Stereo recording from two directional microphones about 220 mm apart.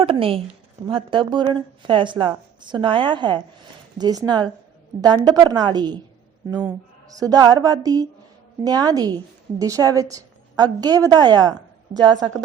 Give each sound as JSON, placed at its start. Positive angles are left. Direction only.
{"t": 0.0, "sound": "speech", "side_deg": -25}
{"t": 7.2, "sound": "speech", "side_deg": -15}